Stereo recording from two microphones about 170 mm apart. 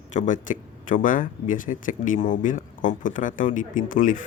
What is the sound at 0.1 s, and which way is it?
Speech, 45° left (ahead or behind).